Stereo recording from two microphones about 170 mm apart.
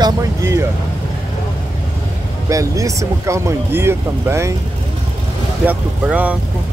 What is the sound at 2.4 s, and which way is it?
Speech, 20° right (ahead or behind).